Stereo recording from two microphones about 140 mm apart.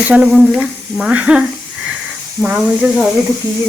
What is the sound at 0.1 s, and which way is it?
Speech, 5° right (ahead or behind).